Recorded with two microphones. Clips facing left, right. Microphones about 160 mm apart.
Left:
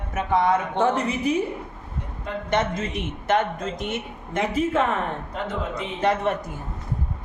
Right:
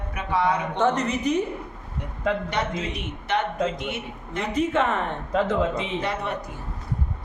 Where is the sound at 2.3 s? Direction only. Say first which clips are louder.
Right 7 dB; 90° right.